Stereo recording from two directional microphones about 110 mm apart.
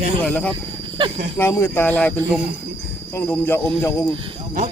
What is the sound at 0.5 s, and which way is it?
Speech, 50° right (ahead or behind).